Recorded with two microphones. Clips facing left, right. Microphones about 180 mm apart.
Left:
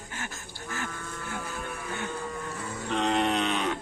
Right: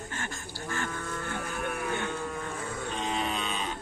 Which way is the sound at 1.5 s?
60° right (ahead or behind).